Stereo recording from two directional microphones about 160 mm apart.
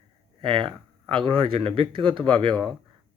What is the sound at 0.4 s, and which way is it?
Speech, 35° right (ahead or behind).